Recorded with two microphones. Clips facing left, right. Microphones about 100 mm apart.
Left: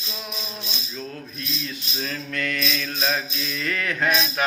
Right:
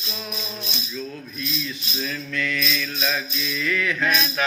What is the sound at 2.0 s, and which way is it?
Mantra, 50° left (ahead or behind).